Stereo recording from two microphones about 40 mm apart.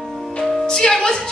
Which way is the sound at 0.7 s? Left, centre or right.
Centre.